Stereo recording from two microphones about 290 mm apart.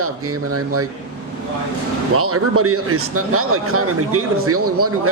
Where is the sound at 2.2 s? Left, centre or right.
Right.